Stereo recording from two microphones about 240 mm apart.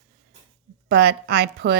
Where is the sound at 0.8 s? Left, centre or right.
Right.